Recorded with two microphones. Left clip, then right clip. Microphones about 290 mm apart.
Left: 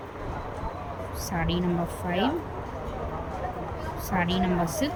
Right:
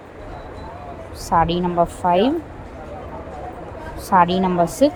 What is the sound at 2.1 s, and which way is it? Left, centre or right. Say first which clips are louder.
Speech: right 9 dB; centre.